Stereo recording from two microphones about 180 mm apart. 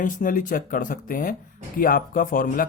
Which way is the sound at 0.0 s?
45° left (ahead or behind).